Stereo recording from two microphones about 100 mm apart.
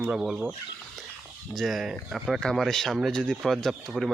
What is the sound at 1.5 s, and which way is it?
Speech, centre (ahead or behind).